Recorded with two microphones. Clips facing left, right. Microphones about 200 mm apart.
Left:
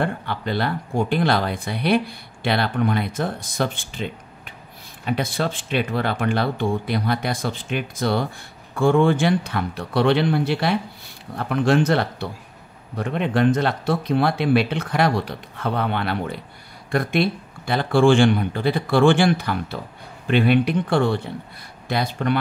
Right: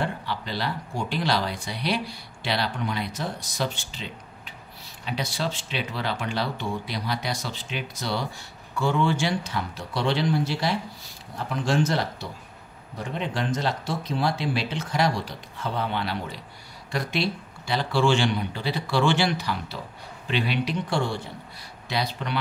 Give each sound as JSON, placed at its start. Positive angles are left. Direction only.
{"t": 0.0, "sound": "speech", "side_deg": 55}